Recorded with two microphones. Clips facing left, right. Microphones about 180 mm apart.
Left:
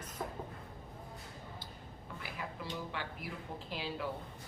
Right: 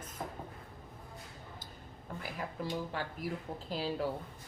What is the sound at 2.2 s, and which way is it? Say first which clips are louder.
A woman's voice: right 4 dB; 45° right (ahead or behind).